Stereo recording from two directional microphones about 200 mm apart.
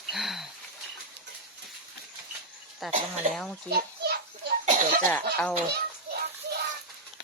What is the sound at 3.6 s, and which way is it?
Children playing, 55° right (ahead or behind).